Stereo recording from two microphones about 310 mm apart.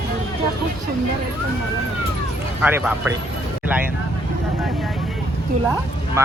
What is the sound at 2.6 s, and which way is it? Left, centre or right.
Speech, centre.